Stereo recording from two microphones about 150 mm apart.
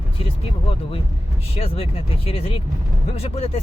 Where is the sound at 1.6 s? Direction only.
40° left (ahead or behind).